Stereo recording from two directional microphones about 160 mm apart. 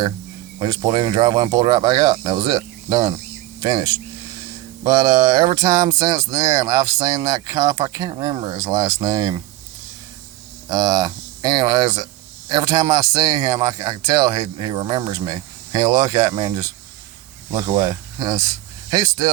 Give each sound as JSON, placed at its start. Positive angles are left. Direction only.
{"t": 0.6, "sound": "speech", "side_deg": -25}
{"t": 10.7, "sound": "speech", "side_deg": -25}